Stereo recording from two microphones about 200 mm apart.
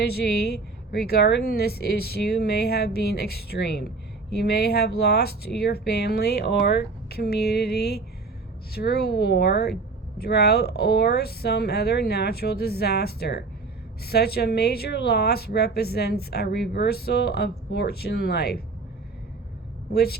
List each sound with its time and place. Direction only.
0.0 s speech: 50° left (ahead or behind)
19.9 s speech: 50° left (ahead or behind)